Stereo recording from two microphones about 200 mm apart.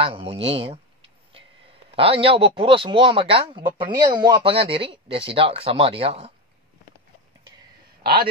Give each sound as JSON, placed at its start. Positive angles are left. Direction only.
{"t": 0.0, "sound": "speech", "side_deg": -30}
{"t": 2.0, "sound": "speech", "side_deg": -25}